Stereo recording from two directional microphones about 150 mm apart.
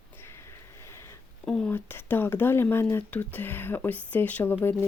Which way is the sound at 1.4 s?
5° left (ahead or behind).